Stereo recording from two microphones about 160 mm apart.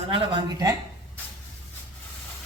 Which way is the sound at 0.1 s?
25° right (ahead or behind).